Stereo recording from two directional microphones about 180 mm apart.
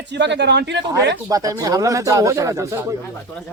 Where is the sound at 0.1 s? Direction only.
75° right (ahead or behind).